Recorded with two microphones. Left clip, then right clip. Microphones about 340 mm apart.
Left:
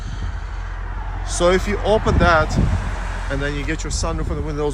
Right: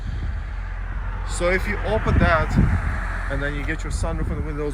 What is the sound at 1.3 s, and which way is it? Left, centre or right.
Speech, centre.